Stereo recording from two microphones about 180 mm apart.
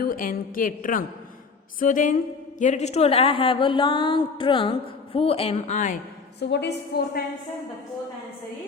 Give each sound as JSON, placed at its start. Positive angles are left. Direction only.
{"t": 0.0, "sound": "a woman's voice", "side_deg": 50}
{"t": 6.4, "sound": "a woman's voice", "side_deg": 70}